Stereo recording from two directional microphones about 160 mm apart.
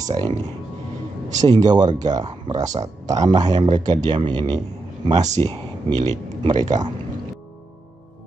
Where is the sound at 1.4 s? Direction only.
25° right (ahead or behind).